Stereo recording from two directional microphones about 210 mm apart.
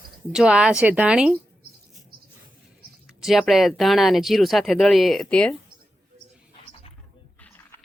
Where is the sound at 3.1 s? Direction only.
Centre (ahead or behind).